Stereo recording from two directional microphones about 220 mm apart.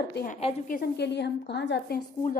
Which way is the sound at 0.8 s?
50° left (ahead or behind).